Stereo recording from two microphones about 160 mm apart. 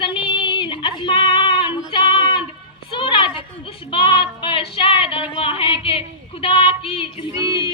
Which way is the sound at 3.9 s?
30° left (ahead or behind).